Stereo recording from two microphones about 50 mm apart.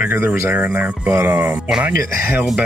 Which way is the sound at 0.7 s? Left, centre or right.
Right.